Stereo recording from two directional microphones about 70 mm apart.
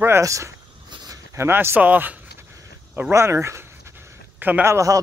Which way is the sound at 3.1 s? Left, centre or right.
Right.